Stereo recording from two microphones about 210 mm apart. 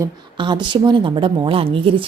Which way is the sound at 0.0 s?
20° right (ahead or behind).